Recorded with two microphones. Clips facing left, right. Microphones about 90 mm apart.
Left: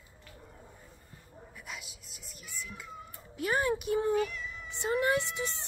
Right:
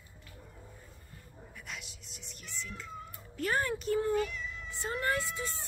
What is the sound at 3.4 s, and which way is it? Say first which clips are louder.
Speech: left 2 dB; 10° left (ahead or behind).